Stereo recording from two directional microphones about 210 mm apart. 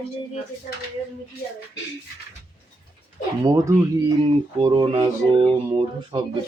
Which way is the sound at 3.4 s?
15° right (ahead or behind).